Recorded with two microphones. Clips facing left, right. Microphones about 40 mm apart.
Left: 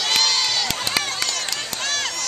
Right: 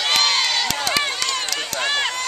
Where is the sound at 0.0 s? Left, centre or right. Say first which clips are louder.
Right 2 dB; centre.